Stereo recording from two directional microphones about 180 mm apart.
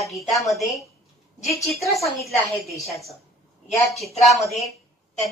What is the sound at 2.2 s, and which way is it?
Speech, centre (ahead or behind).